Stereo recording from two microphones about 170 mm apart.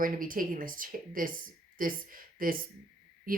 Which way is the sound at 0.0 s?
55° right (ahead or behind).